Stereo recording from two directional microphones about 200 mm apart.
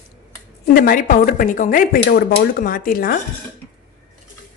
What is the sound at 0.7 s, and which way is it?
Speech, 45° left (ahead or behind).